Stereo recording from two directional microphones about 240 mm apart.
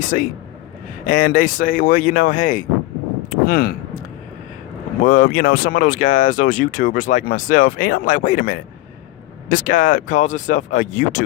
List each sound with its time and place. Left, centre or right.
0.1 s speech: left
5.0 s speech: left